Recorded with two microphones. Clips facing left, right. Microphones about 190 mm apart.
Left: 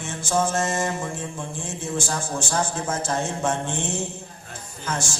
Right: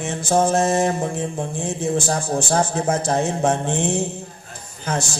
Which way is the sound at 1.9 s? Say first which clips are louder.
Right 6 dB; 35° right (ahead or behind).